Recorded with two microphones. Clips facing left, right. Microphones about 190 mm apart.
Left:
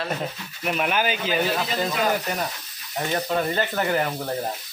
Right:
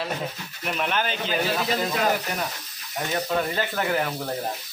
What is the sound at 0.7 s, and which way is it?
Speech, 5° left (ahead or behind).